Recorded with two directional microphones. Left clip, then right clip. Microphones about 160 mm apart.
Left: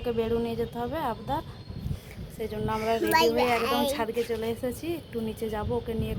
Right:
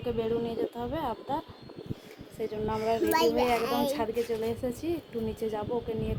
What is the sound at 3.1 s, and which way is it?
Speech, 20° right (ahead or behind).